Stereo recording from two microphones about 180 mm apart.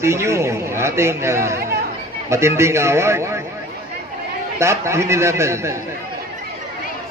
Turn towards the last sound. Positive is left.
turn(degrees=-15)  # may be behind; listen again after turning